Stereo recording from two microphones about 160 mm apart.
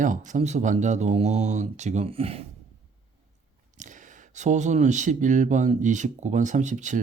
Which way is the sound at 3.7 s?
50° right (ahead or behind).